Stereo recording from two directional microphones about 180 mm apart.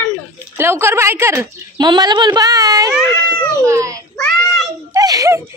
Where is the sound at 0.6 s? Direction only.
15° right (ahead or behind).